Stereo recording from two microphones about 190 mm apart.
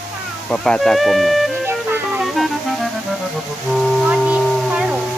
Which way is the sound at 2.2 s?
Centre (ahead or behind).